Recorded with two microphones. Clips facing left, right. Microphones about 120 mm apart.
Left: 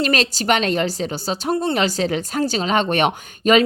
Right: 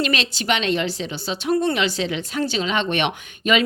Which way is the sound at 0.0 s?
40° left (ahead or behind).